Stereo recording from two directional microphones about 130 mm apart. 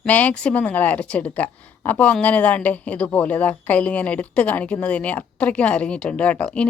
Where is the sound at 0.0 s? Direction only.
10° left (ahead or behind).